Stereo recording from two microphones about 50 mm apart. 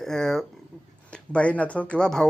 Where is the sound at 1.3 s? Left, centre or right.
Left.